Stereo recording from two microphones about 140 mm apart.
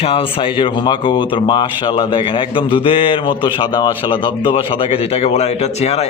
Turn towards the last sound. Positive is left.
turn(degrees=50)  # may be behind; listen again after turning